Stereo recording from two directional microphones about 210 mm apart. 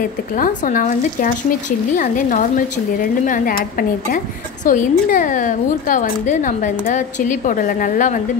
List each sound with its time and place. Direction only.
0.4 s a woman's voice: 40° left (ahead or behind)